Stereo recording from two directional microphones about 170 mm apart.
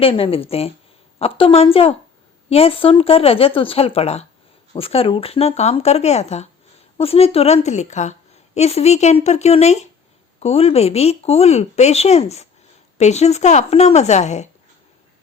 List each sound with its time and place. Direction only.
0.0 s speech: 35° left (ahead or behind)